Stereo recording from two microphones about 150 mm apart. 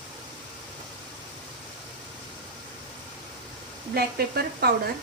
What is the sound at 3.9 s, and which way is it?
Speech, 90° right.